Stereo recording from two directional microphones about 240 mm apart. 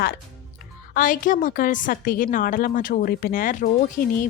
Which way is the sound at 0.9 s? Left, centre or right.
Left.